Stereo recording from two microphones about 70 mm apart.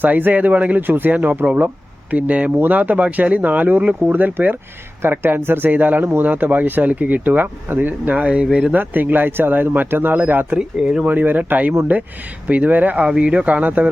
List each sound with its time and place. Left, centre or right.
0.0 s speech: right
8.7 s speech: right
10.6 s speech: centre
11.1 s speech: right